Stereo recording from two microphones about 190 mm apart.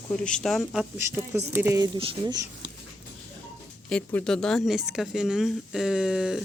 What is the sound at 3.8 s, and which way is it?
Speech, 5° left (ahead or behind).